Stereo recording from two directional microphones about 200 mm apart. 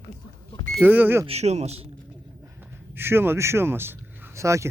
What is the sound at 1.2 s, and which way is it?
Speech, 35° right (ahead or behind).